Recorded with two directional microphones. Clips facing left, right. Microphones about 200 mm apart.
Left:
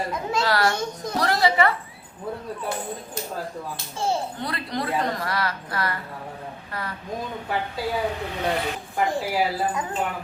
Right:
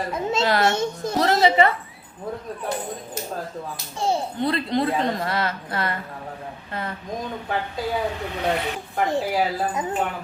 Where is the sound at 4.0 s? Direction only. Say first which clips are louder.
Right 3 dB; 20° right (ahead or behind).